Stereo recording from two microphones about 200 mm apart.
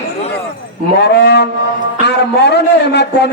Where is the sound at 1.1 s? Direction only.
55° left (ahead or behind).